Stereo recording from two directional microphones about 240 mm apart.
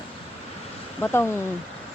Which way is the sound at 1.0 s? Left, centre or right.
Centre.